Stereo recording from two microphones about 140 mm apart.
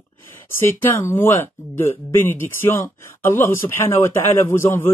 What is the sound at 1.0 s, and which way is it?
Speech, 15° left (ahead or behind).